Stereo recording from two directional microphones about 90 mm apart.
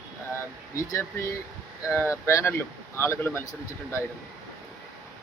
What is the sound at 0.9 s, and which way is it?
Speech, 35° left (ahead or behind).